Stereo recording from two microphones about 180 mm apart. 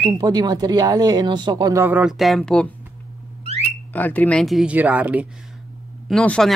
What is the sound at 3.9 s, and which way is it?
Speech, 10° left (ahead or behind).